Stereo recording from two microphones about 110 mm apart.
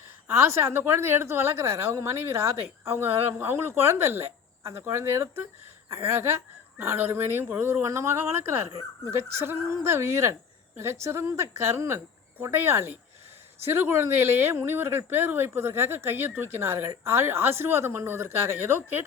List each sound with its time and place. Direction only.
0.3 s a woman's voice: 25° right (ahead or behind)